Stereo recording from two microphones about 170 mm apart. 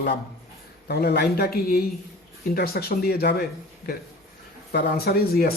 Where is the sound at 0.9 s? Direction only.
70° left (ahead or behind).